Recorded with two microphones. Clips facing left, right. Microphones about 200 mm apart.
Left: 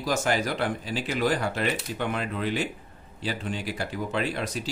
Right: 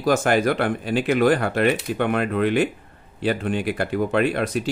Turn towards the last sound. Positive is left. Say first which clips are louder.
# right 8 dB
turn(degrees=-60)  # may be behind; listen again after turning